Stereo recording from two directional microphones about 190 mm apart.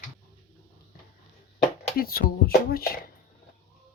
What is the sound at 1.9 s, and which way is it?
Speech, 50° left (ahead or behind).